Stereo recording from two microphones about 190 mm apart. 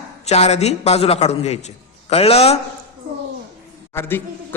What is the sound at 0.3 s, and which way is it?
A man's voice, 35° left (ahead or behind).